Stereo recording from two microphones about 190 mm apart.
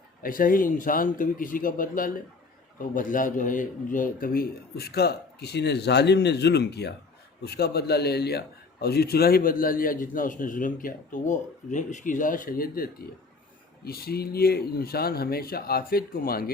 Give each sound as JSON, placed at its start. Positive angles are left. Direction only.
{"t": 0.2, "sound": "a man's voice", "side_deg": 45}